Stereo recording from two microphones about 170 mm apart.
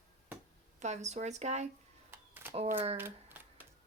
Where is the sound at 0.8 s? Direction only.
40° right (ahead or behind).